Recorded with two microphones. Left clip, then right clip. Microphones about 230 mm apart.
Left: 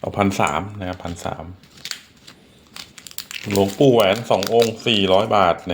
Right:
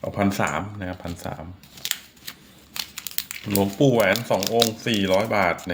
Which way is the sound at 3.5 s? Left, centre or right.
Centre.